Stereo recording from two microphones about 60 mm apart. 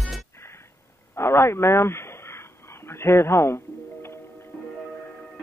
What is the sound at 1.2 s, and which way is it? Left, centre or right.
Radio, left.